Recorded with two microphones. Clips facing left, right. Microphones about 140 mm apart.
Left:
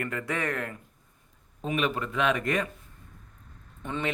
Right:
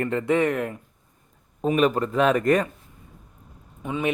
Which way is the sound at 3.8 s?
5° right (ahead or behind).